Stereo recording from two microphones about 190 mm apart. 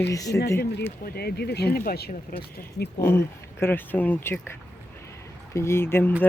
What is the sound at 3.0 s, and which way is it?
Speech, 10° left (ahead or behind).